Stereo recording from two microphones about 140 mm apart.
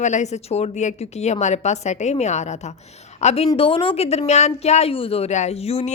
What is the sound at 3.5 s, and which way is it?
A woman's voice, 40° left (ahead or behind).